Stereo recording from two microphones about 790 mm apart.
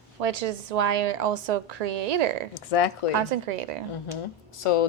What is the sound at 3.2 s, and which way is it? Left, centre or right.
Speech, right.